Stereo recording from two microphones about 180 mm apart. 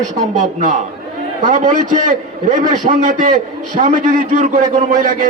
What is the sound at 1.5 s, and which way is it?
A man's voice, 45° right (ahead or behind).